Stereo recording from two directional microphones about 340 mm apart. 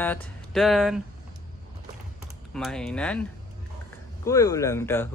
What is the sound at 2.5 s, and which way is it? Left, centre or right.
Speech, centre.